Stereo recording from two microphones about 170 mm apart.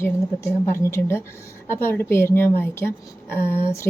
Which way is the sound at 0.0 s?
15° left (ahead or behind).